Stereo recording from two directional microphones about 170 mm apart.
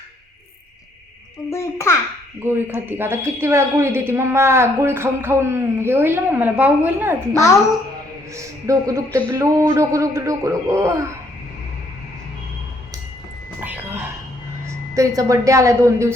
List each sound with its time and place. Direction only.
1.5 s a child's voice: 15° left (ahead or behind)
2.4 s a woman's voice: 10° right (ahead or behind)
8.3 s a sound: 20° right (ahead or behind)
9.1 s a woman's voice: 15° right (ahead or behind)
13.6 s a sound: 10° right (ahead or behind)
14.9 s a woman's voice: 20° right (ahead or behind)